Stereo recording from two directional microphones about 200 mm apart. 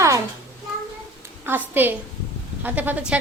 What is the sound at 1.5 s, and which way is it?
Speech, 10° right (ahead or behind).